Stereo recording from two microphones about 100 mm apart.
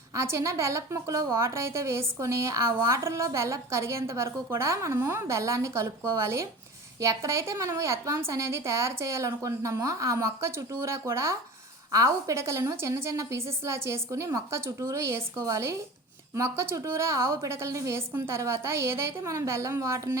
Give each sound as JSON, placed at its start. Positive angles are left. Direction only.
{"t": 0.1, "sound": "a woman's voice", "side_deg": -30}